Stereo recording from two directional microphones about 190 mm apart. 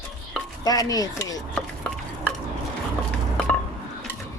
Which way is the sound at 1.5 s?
5° left (ahead or behind).